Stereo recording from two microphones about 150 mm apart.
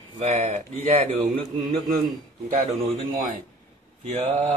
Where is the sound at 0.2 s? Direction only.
55° right (ahead or behind).